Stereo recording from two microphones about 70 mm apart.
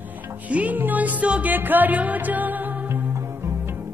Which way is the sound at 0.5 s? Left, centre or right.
Right.